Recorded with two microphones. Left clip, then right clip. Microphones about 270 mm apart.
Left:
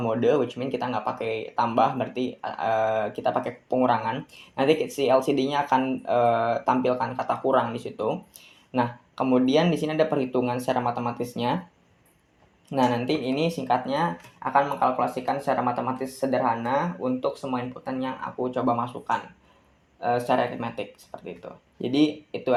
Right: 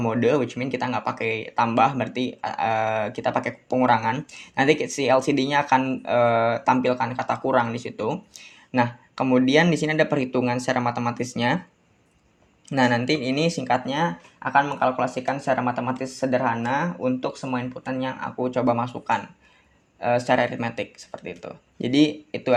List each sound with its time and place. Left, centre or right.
0.0 s speech: right
12.6 s speech: right